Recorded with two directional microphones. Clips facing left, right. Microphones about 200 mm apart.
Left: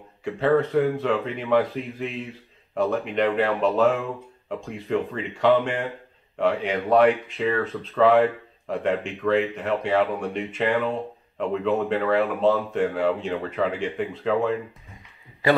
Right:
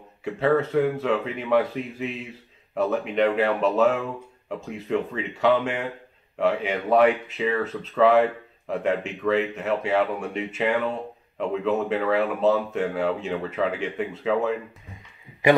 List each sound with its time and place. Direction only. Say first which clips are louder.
0.2 s speech: left 1 dB; 5° right (ahead or behind)
15.4 s a man's voice: right 2 dB; 20° right (ahead or behind)